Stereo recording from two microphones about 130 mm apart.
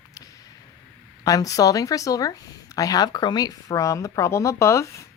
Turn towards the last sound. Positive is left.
turn(degrees=20)  # may be behind; listen again after turning